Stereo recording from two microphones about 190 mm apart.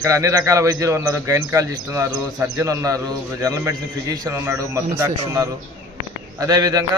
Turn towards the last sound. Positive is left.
turn(degrees=-20)  # may be behind; listen again after turning